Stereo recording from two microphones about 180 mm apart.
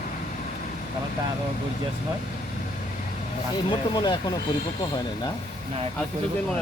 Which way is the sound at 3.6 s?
25° left (ahead or behind).